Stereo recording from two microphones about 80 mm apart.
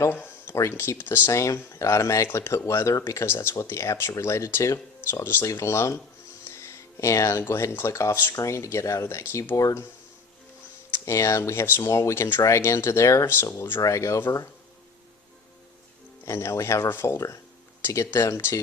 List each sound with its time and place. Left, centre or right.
0.4 s speech: left
1.3 s speech: left
10.9 s speech: left
13.8 s speech: left
16.2 s speech: left